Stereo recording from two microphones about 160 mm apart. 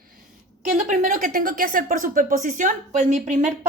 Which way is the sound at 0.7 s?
55° right (ahead or behind).